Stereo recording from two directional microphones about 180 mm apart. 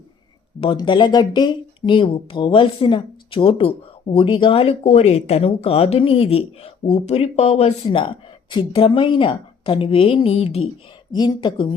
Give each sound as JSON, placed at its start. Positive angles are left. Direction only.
{"t": 0.6, "sound": "speech", "side_deg": 30}
{"t": 11.1, "sound": "speech", "side_deg": 25}